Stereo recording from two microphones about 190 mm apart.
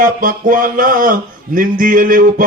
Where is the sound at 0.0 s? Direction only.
45° right (ahead or behind).